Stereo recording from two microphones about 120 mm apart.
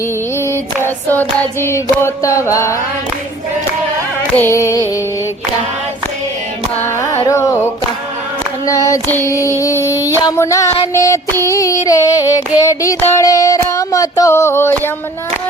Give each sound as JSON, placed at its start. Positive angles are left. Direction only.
{"t": 0.3, "sound": "music", "side_deg": 20}
{"t": 0.9, "sound": "child singing", "side_deg": 15}
{"t": 4.4, "sound": "child singing", "side_deg": 20}
{"t": 6.7, "sound": "carnatic music", "side_deg": 20}
{"t": 7.3, "sound": "a sound", "side_deg": 25}
{"t": 8.6, "sound": "child singing", "side_deg": 25}